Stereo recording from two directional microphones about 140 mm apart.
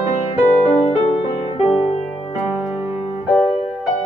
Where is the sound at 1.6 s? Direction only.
45° left (ahead or behind).